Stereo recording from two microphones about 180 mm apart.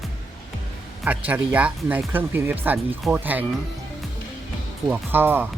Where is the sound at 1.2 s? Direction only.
10° right (ahead or behind).